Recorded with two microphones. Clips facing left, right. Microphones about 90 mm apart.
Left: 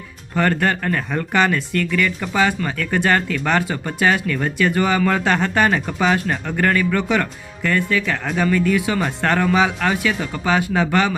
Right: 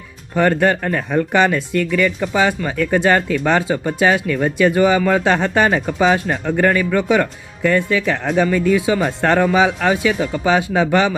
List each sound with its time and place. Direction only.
0.3 s speech: 20° right (ahead or behind)